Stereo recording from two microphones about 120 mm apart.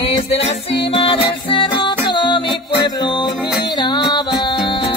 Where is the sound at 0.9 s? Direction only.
40° left (ahead or behind).